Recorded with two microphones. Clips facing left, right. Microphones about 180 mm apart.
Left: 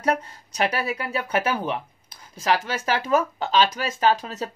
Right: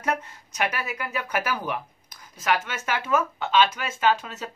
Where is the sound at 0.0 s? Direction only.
35° left (ahead or behind).